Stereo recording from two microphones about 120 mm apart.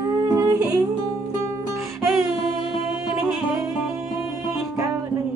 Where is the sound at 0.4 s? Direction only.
30° right (ahead or behind).